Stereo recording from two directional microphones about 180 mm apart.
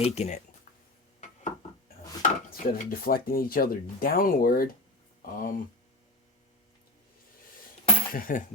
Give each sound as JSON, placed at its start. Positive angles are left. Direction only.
{"t": 0.0, "sound": "speech", "side_deg": 40}
{"t": 2.2, "sound": "speech", "side_deg": 55}
{"t": 8.1, "sound": "speech", "side_deg": 50}